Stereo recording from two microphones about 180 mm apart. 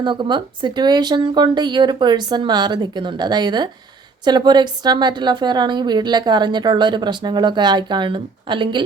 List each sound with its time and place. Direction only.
0.0 s a woman's voice: 25° right (ahead or behind)